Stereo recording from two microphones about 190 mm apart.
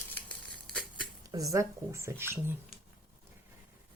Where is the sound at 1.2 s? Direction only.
20° right (ahead or behind).